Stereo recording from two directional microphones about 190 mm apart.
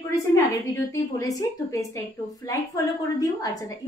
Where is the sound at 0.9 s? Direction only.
15° left (ahead or behind).